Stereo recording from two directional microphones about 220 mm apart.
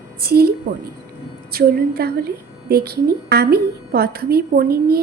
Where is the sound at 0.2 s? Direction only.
45° right (ahead or behind).